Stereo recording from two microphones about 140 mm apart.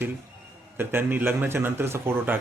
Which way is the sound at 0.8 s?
15° right (ahead or behind).